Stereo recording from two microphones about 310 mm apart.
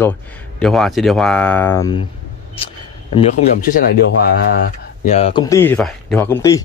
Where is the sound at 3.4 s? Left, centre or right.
Centre.